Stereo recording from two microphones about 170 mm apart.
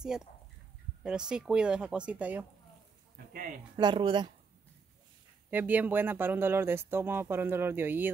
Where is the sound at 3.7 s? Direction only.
25° right (ahead or behind).